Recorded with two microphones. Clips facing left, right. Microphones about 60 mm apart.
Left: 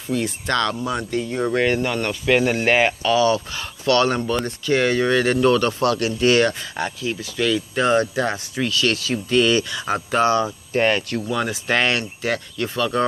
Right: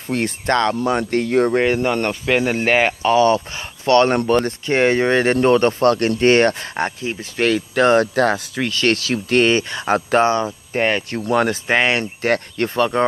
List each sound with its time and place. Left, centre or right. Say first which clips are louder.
0.1 s speech: right 2 dB; right
0.5 s speech: right 5 dB; right
0.8 s speech: right 5 dB; right
1.5 s speech: right 3 dB; right
2.2 s speech: left 1 dB; right
7.4 s speech: right 4 dB; right
8.6 s speech: right 2 dB; right
8.9 s speech: right 3 dB; right
9.4 s speech: right 1 dB; right
11.2 s speech: right 9 dB; right
11.6 s speech: right 3 dB; right
12.2 s speech: right 5 dB; right